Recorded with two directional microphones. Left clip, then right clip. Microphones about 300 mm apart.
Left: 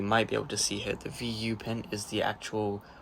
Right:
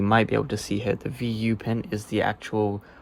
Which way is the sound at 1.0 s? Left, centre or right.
Right.